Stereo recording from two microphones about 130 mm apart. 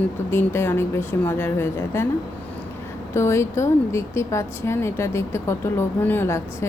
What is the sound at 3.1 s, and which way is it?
Speech, 20° left (ahead or behind).